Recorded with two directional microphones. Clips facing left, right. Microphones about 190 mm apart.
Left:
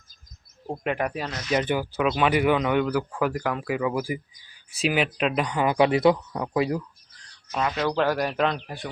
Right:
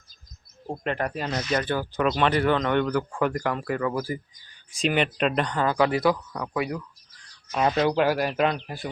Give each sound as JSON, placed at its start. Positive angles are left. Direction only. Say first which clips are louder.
{"t": 0.7, "sound": "speech", "louder": "left 1 dB", "side_deg": 10}
{"t": 7.9, "sound": "speech", "louder": "right 1 dB", "side_deg": -10}